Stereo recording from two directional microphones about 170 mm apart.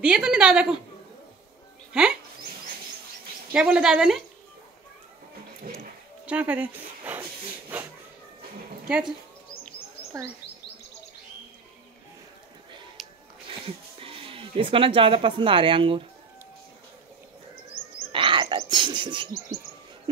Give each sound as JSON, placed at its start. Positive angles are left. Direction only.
{"t": 0.0, "sound": "a woman's voice", "side_deg": -5}
{"t": 1.9, "sound": "a woman's voice", "side_deg": -5}
{"t": 3.5, "sound": "a woman's voice", "side_deg": -5}
{"t": 6.2, "sound": "speech", "side_deg": -10}
{"t": 7.7, "sound": "a sound", "side_deg": -10}
{"t": 8.8, "sound": "speech", "side_deg": -5}
{"t": 13.0, "sound": "music", "side_deg": 0}
{"t": 13.5, "sound": "speech", "side_deg": -35}
{"t": 18.1, "sound": "frog", "side_deg": -30}